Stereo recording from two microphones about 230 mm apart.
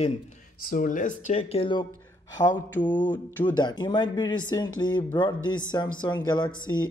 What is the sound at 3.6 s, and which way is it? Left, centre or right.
Speech, centre.